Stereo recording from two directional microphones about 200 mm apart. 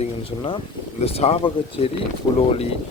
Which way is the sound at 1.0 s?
30° left (ahead or behind).